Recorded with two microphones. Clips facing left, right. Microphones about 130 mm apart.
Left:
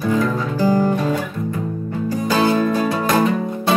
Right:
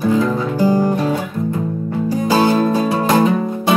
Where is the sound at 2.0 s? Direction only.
15° right (ahead or behind).